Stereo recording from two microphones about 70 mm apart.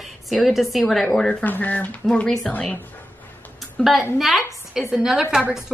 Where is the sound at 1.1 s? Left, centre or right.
Left.